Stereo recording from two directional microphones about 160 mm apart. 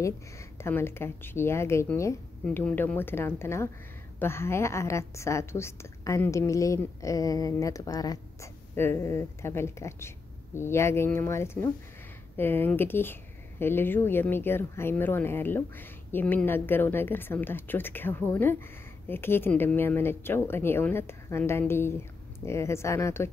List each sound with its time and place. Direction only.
0.0 s speech: 15° left (ahead or behind)